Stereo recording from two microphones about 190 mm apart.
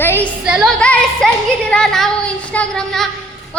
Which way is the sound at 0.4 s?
5° right (ahead or behind).